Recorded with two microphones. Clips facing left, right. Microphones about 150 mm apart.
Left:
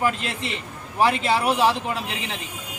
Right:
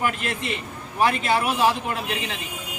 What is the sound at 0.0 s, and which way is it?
A man's voice, 25° left (ahead or behind).